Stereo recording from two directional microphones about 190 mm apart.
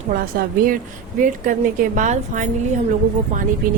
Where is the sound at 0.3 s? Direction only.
50° right (ahead or behind).